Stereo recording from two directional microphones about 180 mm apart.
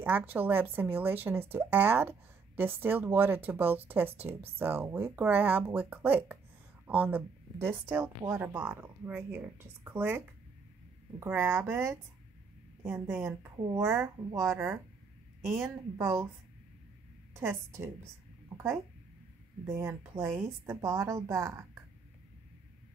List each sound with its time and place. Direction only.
0.0 s a woman's voice: 10° right (ahead or behind)
17.3 s a woman's voice: 15° right (ahead or behind)
19.6 s a woman's voice: 15° right (ahead or behind)